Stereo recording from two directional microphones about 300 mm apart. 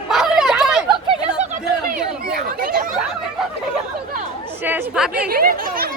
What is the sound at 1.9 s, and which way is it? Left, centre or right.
Chatter, right.